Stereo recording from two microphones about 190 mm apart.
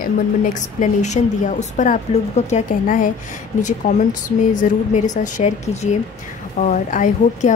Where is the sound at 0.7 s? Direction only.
40° left (ahead or behind).